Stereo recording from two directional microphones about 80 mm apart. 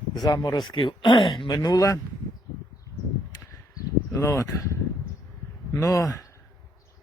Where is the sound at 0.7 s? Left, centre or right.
Left.